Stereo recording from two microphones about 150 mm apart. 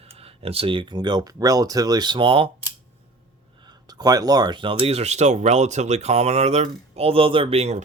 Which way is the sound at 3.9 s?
25° right (ahead or behind).